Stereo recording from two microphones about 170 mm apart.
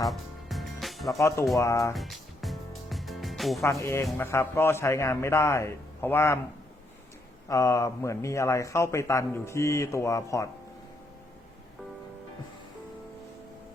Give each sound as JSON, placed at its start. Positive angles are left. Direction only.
{"t": 0.0, "sound": "music", "side_deg": 0}
{"t": 1.5, "sound": "speech", "side_deg": 20}
{"t": 1.9, "sound": "music", "side_deg": 0}
{"t": 3.6, "sound": "speech", "side_deg": 20}
{"t": 7.4, "sound": "speech", "side_deg": 15}